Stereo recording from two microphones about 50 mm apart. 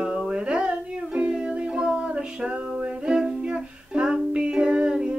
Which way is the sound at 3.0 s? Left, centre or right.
Centre.